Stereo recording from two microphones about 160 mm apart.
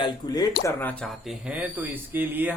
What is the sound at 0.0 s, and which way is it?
Speech, 25° left (ahead or behind).